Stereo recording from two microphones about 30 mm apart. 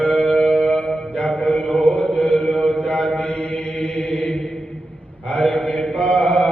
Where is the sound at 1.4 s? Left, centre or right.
Left.